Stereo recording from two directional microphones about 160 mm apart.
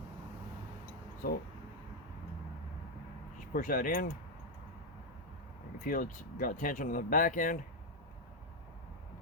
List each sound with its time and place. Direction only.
3.5 s speech: 60° left (ahead or behind)
5.8 s speech: 60° left (ahead or behind)